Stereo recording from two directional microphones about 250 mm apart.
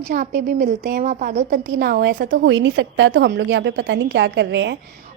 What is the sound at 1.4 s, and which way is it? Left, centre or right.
A woman's voice, right.